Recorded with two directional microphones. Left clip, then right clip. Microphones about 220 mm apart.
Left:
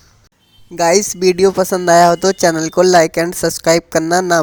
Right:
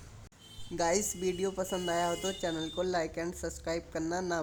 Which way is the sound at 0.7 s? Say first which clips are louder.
Left 18 dB; 40° left (ahead or behind).